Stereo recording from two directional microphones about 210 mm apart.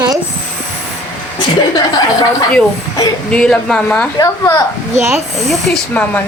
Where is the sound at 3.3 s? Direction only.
5° left (ahead or behind).